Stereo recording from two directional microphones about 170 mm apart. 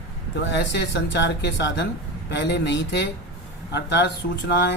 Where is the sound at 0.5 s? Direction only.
85° left.